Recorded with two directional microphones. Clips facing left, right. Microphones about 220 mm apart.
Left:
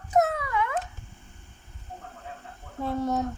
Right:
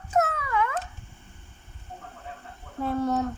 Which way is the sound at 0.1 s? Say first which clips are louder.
Left 2 dB; 15° left (ahead or behind).